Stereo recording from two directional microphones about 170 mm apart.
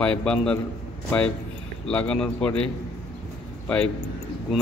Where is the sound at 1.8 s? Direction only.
5° left (ahead or behind).